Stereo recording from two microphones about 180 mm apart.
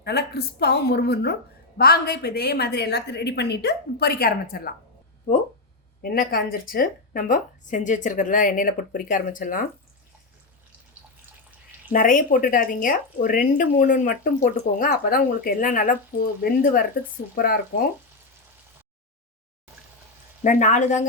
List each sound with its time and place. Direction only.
0.0 s a woman's voice: 60° left (ahead or behind)
6.0 s speech: 55° left (ahead or behind)
11.9 s a woman's voice: 50° left (ahead or behind)
20.4 s speech: 45° left (ahead or behind)